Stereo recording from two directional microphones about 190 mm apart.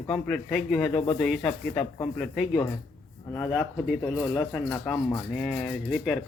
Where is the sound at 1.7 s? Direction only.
20° left (ahead or behind).